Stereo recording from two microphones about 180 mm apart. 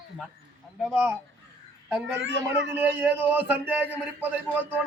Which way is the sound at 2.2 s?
75° right (ahead or behind).